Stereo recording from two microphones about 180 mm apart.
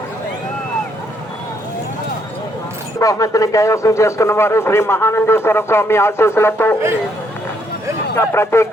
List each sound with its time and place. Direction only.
3.0 s speech: 20° left (ahead or behind)
8.1 s speech: 15° left (ahead or behind)